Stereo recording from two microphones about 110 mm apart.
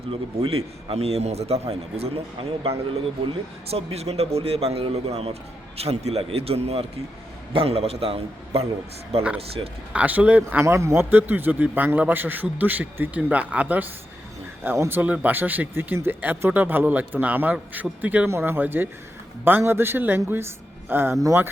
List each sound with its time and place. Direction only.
0.1 s a man's voice: 55° right (ahead or behind)
3.7 s a man's voice: 65° right (ahead or behind)
9.6 s speech: 50° right (ahead or behind)
9.9 s a man's voice: 15° right (ahead or behind)